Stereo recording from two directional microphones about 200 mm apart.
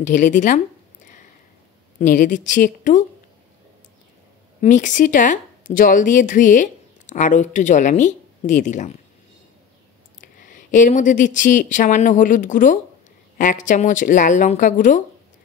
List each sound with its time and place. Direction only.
0.0 s speech: 40° left (ahead or behind)
2.0 s speech: 40° left (ahead or behind)
4.6 s speech: 40° left (ahead or behind)
10.4 s speech: 40° left (ahead or behind)